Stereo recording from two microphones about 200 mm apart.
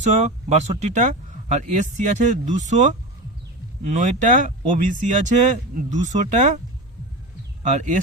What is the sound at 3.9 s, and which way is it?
Speech, 35° right (ahead or behind).